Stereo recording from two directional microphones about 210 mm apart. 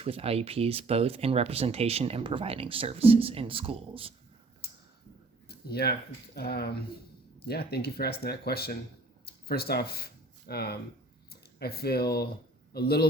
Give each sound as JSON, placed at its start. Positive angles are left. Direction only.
{"t": 0.0, "sound": "speech", "side_deg": -30}
{"t": 5.5, "sound": "speech", "side_deg": 50}